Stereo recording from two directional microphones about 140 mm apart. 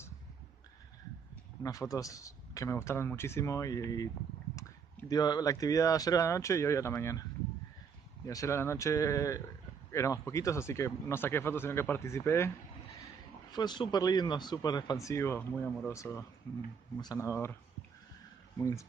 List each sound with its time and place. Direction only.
1.6 s speech: 25° left (ahead or behind)
8.3 s speech: 20° left (ahead or behind)
13.5 s speech: 30° left (ahead or behind)
18.6 s speech: 20° left (ahead or behind)